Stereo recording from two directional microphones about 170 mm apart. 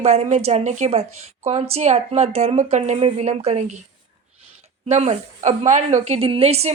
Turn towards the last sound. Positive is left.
turn(degrees=-40)  # may be behind; listen again after turning